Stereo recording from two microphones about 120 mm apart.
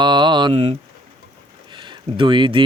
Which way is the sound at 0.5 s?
60° right (ahead or behind).